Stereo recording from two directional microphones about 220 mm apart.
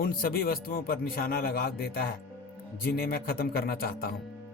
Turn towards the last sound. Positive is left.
turn(degrees=45)  # may be behind; listen again after turning